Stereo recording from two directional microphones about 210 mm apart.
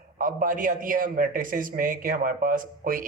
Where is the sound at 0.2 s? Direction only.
40° right (ahead or behind).